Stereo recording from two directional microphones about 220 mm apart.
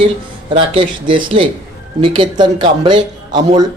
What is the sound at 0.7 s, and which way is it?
Speech, 20° right (ahead or behind).